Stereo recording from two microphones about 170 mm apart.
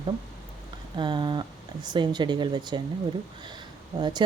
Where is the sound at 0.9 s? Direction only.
25° right (ahead or behind).